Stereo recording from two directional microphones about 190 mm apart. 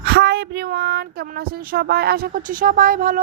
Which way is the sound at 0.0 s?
60° right (ahead or behind).